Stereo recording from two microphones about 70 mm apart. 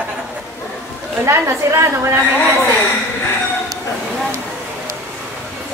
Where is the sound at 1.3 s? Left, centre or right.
Right.